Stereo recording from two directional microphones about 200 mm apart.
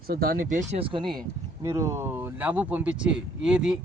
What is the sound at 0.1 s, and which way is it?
Speech, 50° right (ahead or behind).